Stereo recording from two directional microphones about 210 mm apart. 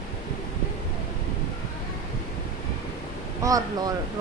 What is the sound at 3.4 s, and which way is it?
Speech, 15° right (ahead or behind).